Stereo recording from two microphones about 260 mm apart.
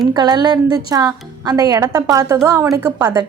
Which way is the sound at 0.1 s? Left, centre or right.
Centre.